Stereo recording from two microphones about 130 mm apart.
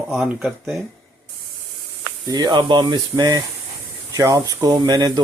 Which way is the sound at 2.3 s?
30° right (ahead or behind).